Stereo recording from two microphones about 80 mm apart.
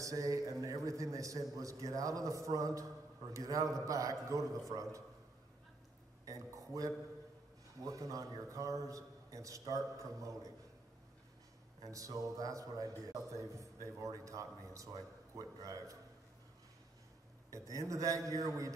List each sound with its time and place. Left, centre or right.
0.0 s a man's voice: right
6.2 s a man's voice: right
11.8 s a man's voice: right
17.5 s a man's voice: right